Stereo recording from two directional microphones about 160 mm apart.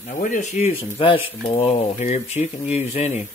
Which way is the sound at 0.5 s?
40° left (ahead or behind).